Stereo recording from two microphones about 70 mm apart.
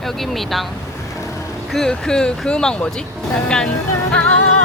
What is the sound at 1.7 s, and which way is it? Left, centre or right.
Speech, centre.